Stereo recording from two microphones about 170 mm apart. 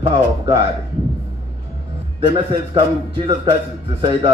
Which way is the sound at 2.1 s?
30° right (ahead or behind).